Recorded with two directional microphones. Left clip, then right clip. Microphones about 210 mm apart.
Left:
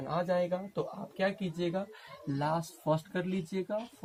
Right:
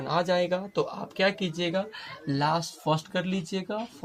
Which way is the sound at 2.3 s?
20° right (ahead or behind).